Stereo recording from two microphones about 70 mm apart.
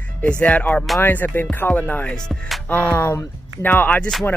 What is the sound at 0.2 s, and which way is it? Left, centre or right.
Speech, centre.